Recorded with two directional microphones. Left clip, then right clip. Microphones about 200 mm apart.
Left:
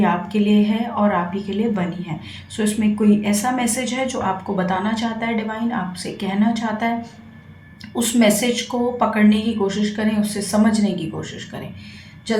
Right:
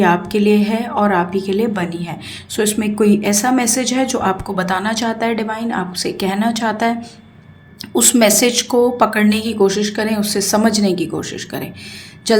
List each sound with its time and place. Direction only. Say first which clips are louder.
0.0 s speech: right 6 dB; 50° right (ahead or behind)
7.9 s speech: right 5 dB; 50° right (ahead or behind)